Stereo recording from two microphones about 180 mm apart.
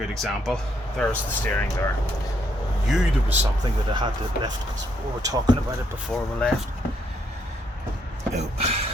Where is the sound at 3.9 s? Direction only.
25° right (ahead or behind).